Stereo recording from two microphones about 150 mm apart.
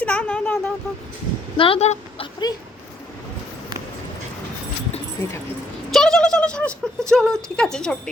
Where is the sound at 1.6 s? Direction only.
40° left (ahead or behind).